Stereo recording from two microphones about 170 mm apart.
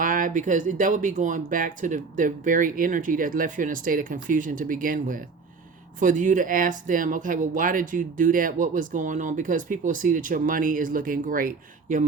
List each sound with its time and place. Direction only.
0.0 s speech: 50° right (ahead or behind)